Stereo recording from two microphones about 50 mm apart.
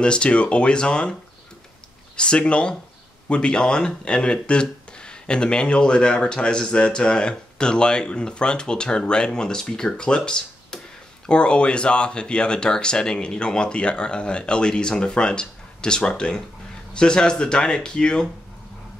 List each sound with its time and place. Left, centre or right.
0.0 s speech: left
2.1 s speech: left